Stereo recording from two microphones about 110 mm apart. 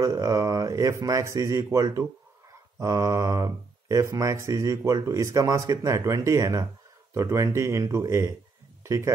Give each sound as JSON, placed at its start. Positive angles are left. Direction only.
{"t": 0.0, "sound": "speech", "side_deg": -30}